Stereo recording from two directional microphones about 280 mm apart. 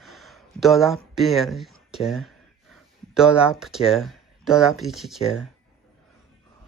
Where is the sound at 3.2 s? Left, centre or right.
Centre.